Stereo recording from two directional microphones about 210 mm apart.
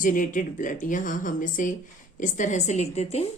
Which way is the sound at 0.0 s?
40° left (ahead or behind).